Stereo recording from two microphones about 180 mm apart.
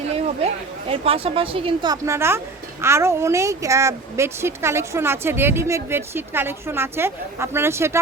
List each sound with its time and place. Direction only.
0.1 s a woman's voice: 35° right (ahead or behind); by 7.9 s 15° right (ahead or behind)